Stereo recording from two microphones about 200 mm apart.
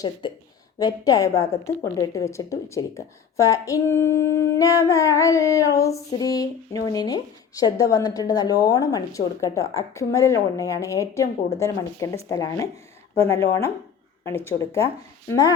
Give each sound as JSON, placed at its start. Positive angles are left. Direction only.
{"t": 0.2, "sound": "a woman's voice", "side_deg": 25}